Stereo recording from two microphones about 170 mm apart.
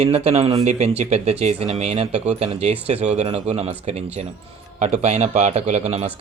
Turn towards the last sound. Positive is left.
turn(degrees=-40)  # may be behind; listen again after turning